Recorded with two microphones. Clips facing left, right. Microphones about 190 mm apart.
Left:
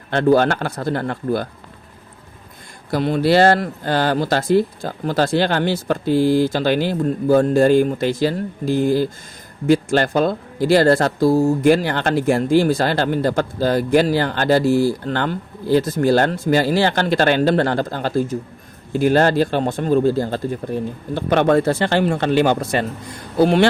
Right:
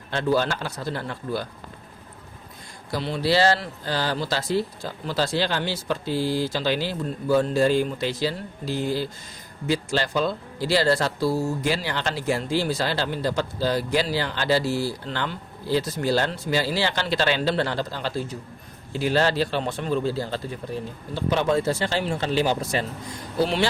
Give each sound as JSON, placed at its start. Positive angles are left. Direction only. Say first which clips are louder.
{"t": 0.1, "sound": "speech", "louder": "left 8 dB", "side_deg": 55}
{"t": 2.9, "sound": "speech", "louder": "left 7 dB", "side_deg": 50}